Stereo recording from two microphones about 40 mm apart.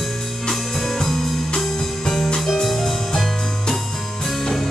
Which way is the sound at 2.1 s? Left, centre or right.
Left.